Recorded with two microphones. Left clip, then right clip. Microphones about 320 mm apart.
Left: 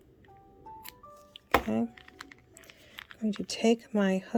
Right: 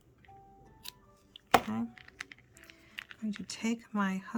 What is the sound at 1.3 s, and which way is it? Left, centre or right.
Music, centre.